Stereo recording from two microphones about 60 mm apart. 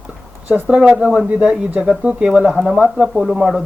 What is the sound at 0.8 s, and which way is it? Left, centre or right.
Speech, right.